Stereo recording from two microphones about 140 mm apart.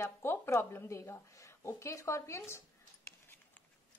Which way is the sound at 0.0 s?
20° left (ahead or behind).